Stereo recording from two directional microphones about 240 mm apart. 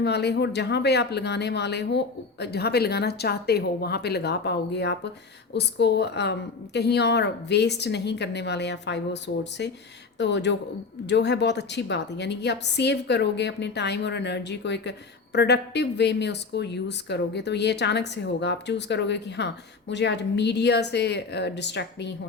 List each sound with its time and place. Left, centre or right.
0.0 s a woman's voice: left